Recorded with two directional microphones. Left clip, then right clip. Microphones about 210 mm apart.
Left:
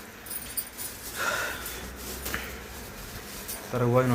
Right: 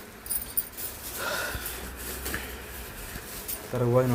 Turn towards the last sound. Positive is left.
turn(degrees=0)  # may be behind; listen again after turning